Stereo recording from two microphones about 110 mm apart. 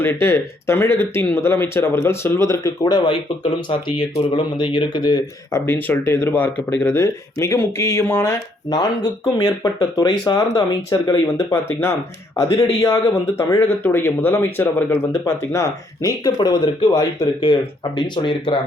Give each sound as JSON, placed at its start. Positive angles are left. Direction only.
{"t": 0.0, "sound": "speech", "side_deg": 20}
{"t": 2.9, "sound": "speech", "side_deg": 50}
{"t": 5.5, "sound": "speech", "side_deg": 20}
{"t": 7.0, "sound": "speech", "side_deg": 25}
{"t": 11.5, "sound": "speech", "side_deg": 25}